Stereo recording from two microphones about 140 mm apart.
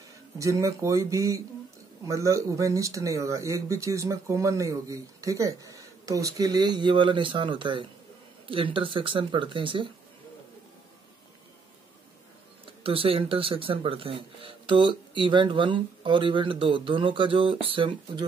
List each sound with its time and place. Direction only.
0.4 s speech: 20° right (ahead or behind)
12.6 s speech: 40° right (ahead or behind)